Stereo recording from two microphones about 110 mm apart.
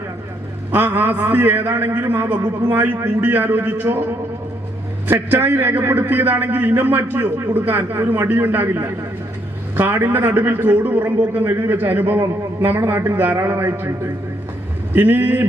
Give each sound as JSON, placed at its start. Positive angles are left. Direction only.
{"t": 0.7, "sound": "a man's voice", "side_deg": -20}
{"t": 5.3, "sound": "a man's voice", "side_deg": -20}
{"t": 14.9, "sound": "a man's voice", "side_deg": -20}